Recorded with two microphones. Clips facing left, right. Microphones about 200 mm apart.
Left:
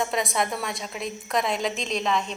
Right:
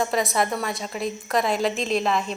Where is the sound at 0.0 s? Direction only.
Centre (ahead or behind).